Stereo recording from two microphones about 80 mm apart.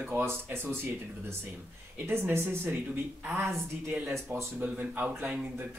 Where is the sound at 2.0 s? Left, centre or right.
Right.